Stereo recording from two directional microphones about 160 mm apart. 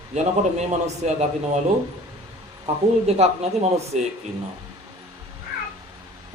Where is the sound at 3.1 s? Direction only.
40° right (ahead or behind).